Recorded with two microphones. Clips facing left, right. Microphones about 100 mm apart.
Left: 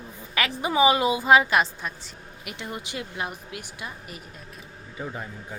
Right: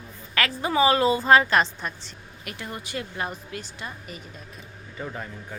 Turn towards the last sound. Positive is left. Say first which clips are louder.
# even
turn(degrees=5)  # may be behind; listen again after turning